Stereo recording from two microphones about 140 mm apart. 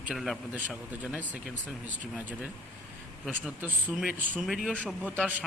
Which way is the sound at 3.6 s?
10° right (ahead or behind).